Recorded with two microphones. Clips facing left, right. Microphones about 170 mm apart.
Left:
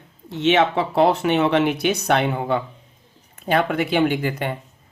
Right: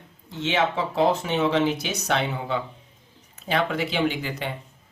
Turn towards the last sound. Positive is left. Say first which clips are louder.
# left 6 dB
turn(degrees=55)  # may be behind; listen again after turning